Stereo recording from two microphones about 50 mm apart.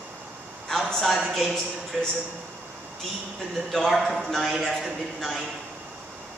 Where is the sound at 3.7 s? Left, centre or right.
Centre.